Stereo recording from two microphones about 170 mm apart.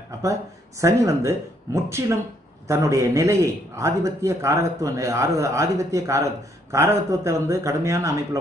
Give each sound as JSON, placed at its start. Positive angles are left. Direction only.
{"t": 0.2, "sound": "a man's voice", "side_deg": -20}